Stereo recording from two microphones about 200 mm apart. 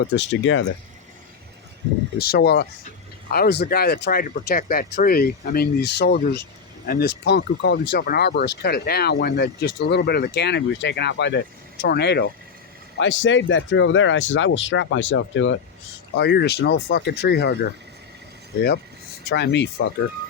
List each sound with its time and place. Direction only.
0.0 s speech: 60° left (ahead or behind)
2.1 s speech: 50° left (ahead or behind)
13.0 s speech: 70° left (ahead or behind)
16.1 s speech: 55° left (ahead or behind)
19.3 s speech: 60° left (ahead or behind)